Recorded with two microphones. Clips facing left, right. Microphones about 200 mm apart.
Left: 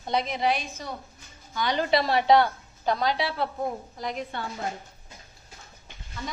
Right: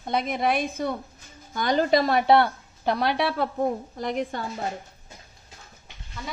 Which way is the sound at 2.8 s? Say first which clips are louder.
Right 2 dB; 60° right (ahead or behind).